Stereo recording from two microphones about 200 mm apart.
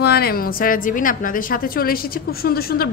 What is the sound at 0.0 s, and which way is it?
A woman's voice, 50° left (ahead or behind).